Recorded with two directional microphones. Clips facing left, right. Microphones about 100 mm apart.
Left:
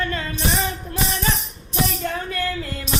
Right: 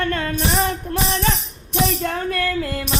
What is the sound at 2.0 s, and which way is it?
Music, 65° right (ahead or behind).